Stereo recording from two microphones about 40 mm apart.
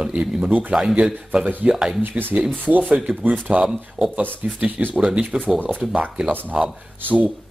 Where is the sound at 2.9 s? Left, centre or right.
Right.